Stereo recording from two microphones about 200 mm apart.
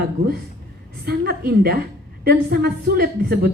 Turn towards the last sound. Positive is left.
turn(degrees=-50)  # may be behind; listen again after turning